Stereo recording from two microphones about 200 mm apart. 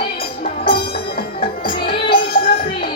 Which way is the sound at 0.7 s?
50° left (ahead or behind).